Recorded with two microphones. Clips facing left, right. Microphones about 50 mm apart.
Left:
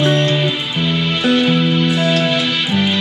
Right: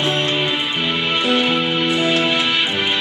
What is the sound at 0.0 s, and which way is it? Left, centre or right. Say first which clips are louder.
Music: left 4 dB; centre.